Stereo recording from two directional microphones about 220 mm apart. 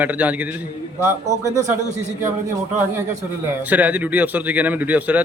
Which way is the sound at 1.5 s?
35° right (ahead or behind).